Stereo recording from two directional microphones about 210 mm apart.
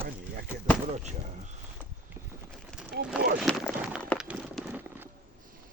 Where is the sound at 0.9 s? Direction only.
35° right (ahead or behind).